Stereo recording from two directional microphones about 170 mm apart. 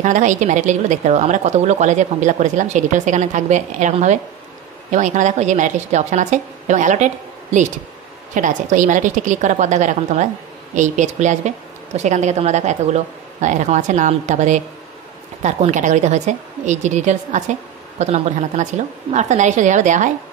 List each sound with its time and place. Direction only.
0.0 s speech: 45° right (ahead or behind)
8.4 s speech: 50° right (ahead or behind)